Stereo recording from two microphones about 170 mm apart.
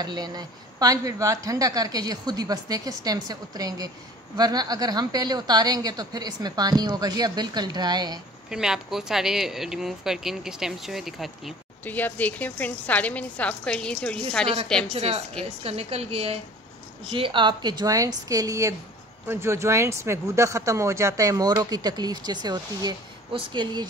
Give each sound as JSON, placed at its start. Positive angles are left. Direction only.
{"t": 0.0, "sound": "speech", "side_deg": -25}
{"t": 8.5, "sound": "speech", "side_deg": -5}
{"t": 11.8, "sound": "a woman's voice", "side_deg": 10}
{"t": 14.9, "sound": "a woman's voice", "side_deg": -40}